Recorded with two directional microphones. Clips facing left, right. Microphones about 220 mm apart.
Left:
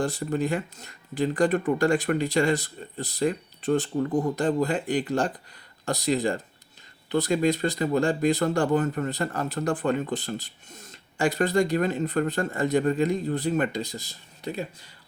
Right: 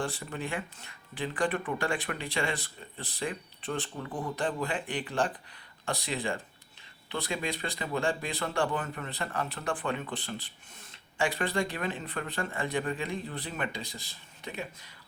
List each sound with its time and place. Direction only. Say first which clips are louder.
0.0 s speech: left 9 dB; 40° left (ahead or behind)